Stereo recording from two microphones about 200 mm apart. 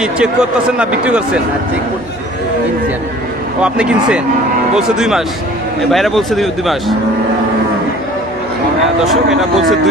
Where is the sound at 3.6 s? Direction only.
5° right (ahead or behind).